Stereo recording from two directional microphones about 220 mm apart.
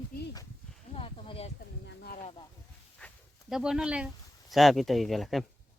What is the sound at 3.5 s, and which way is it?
Speech, 5° right (ahead or behind).